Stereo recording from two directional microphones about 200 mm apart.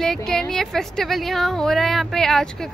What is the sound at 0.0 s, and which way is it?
Speech, 5° left (ahead or behind).